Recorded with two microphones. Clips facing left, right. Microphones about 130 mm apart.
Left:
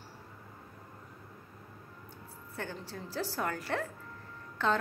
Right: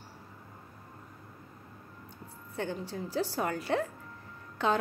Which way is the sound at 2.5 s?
20° right (ahead or behind).